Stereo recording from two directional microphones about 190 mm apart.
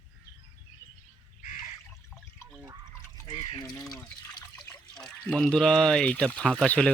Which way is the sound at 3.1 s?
20° left (ahead or behind).